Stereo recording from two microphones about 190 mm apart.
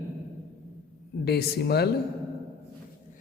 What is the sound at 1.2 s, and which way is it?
Speech, 55° left (ahead or behind).